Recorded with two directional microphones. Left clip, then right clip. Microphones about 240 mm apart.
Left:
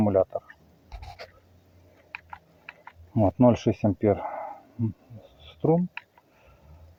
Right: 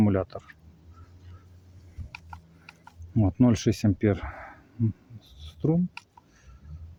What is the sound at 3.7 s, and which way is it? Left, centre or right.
Speech, centre.